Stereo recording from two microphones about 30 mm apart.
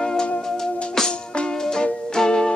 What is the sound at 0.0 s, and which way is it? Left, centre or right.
Music, left.